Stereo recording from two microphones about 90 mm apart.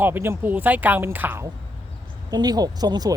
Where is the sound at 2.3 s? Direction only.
50° right (ahead or behind).